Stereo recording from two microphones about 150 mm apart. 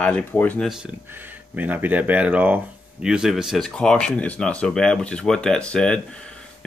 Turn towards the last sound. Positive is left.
turn(degrees=5)  # may be behind; listen again after turning